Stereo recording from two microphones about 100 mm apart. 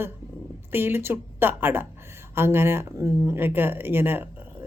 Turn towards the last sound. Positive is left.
turn(degrees=-20)  # may be behind; listen again after turning